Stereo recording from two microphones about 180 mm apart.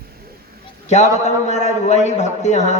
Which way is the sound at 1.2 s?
40° left (ahead or behind).